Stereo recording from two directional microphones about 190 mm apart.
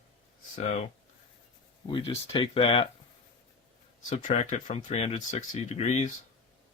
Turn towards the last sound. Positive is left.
turn(degrees=35)  # may be behind; listen again after turning